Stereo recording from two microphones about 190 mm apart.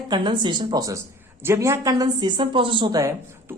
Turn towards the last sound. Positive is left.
turn(degrees=-15)  # may be behind; listen again after turning